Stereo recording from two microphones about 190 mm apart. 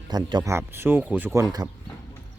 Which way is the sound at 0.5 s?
10° right (ahead or behind).